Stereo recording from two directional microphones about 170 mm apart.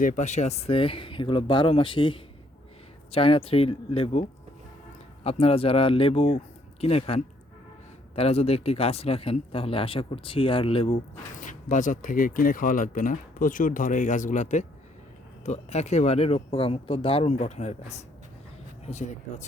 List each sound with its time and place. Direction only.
0.0 s speech: 50° left (ahead or behind); by 10.9 s 35° left (ahead or behind)
11.3 s speech: 50° left (ahead or behind)